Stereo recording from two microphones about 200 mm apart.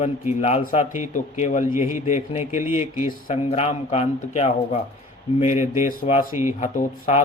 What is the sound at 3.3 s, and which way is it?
A man's voice, 30° left (ahead or behind).